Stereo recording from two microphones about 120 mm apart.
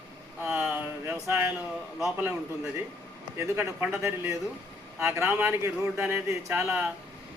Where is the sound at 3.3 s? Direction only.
20° right (ahead or behind).